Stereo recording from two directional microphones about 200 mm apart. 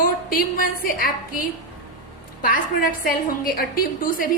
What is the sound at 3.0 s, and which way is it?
A woman's voice, 45° left (ahead or behind).